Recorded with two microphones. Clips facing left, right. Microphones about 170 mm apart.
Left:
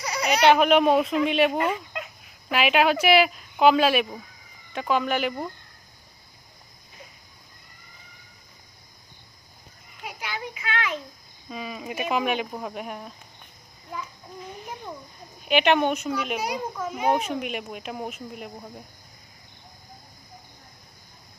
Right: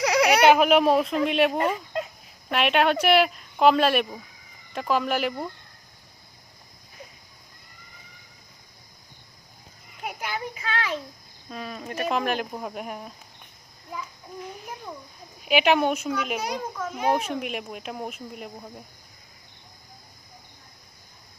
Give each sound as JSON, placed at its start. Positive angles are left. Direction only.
{"t": 0.0, "sound": "a sound", "side_deg": -85}
{"t": 0.4, "sound": "a child's voice", "side_deg": -5}
{"t": 1.5, "sound": "speech", "side_deg": -35}
{"t": 2.5, "sound": "a child's voice", "side_deg": 0}
{"t": 10.0, "sound": "a sound", "side_deg": -50}
{"t": 11.4, "sound": "a child's voice", "side_deg": 5}
{"t": 15.4, "sound": "a child's voice", "side_deg": -5}